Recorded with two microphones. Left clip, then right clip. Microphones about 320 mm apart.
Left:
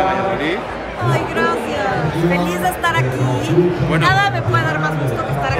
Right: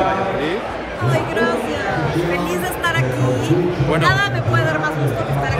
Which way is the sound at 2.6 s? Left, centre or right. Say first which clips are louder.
Left 3 dB; centre.